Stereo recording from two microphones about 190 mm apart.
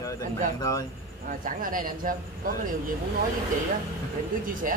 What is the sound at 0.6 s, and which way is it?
Speech, 20° left (ahead or behind).